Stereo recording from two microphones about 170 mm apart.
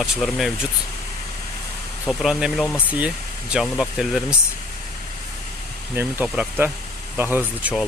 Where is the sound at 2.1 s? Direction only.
Centre (ahead or behind).